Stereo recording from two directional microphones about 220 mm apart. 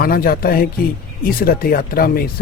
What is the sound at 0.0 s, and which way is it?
Speech, 40° left (ahead or behind).